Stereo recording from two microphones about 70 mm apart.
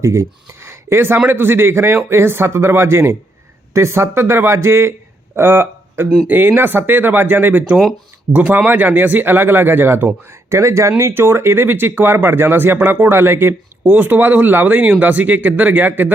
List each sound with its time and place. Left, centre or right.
0.0 s speech: right
10.5 s speech: right